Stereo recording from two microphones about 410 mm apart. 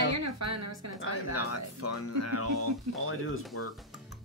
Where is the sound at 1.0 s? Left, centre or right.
Left.